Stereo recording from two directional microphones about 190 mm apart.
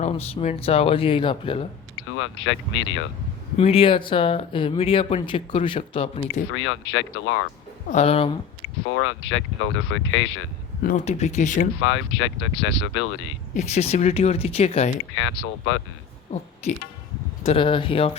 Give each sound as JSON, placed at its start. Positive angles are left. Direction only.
{"t": 0.1, "sound": "speech", "side_deg": 30}
{"t": 2.1, "sound": "speech", "side_deg": 80}
{"t": 3.6, "sound": "speech", "side_deg": 30}
{"t": 6.5, "sound": "speech", "side_deg": 90}
{"t": 7.9, "sound": "speech", "side_deg": 35}
{"t": 9.0, "sound": "speech", "side_deg": 80}
{"t": 10.8, "sound": "speech", "side_deg": 40}
{"t": 11.8, "sound": "speech", "side_deg": 85}
{"t": 13.5, "sound": "speech", "side_deg": 35}
{"t": 15.4, "sound": "speech", "side_deg": 85}
{"t": 16.6, "sound": "speech", "side_deg": 35}